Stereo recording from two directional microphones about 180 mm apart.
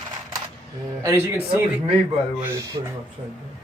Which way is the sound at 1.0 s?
15° right (ahead or behind).